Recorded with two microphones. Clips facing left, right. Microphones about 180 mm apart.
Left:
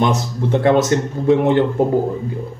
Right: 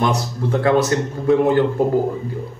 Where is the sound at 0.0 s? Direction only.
25° left (ahead or behind).